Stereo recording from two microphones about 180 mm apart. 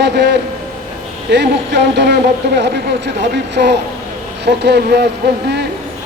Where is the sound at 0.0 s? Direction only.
70° right (ahead or behind).